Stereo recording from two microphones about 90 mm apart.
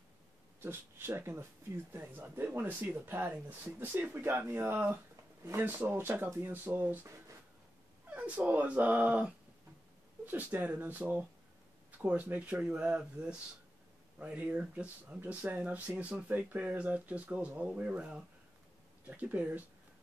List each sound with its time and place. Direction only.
0.6 s speech: 25° right (ahead or behind)
8.1 s speech: 15° right (ahead or behind)